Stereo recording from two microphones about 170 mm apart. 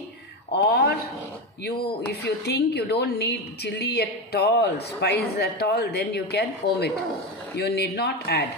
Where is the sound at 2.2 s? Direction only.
80° left.